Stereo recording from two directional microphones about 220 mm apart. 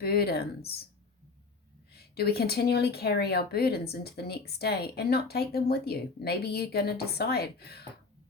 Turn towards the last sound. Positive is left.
turn(degrees=45)  # may be behind; listen again after turning